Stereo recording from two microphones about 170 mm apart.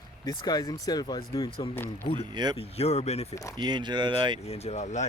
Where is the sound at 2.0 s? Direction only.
35° left (ahead or behind).